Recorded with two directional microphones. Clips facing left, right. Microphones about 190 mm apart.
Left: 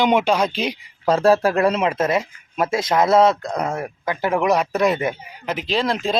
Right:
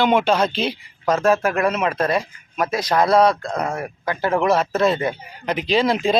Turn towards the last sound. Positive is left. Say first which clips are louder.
# right 3 dB
turn(degrees=0)  # may be behind; listen again after turning